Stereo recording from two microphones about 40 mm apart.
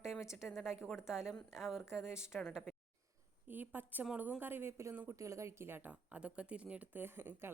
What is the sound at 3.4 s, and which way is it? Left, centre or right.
Speech, right.